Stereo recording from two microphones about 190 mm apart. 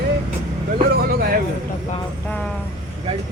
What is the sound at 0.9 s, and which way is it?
Speech, 55° right (ahead or behind).